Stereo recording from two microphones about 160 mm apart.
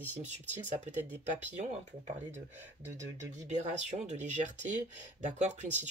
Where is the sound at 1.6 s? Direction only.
45° right (ahead or behind).